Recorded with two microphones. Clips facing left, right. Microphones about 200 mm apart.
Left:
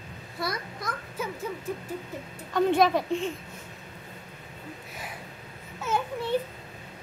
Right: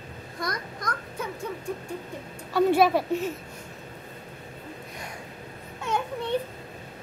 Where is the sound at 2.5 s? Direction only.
10° right (ahead or behind).